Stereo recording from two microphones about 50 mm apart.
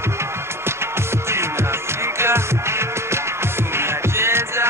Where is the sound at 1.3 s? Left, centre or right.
Right.